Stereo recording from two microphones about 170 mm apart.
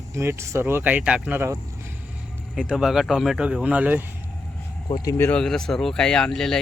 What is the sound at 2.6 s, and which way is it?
Speech, 5° right (ahead or behind).